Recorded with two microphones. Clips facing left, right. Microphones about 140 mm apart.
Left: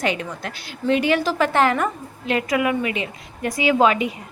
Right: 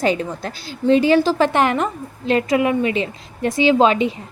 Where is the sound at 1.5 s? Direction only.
20° right (ahead or behind).